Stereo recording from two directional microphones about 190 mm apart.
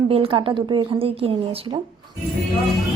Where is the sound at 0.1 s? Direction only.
30° right (ahead or behind).